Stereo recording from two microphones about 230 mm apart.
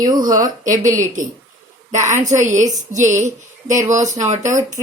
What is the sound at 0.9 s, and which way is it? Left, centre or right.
A woman's voice, right.